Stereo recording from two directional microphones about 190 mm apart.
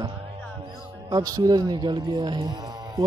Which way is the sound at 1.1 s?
20° right (ahead or behind).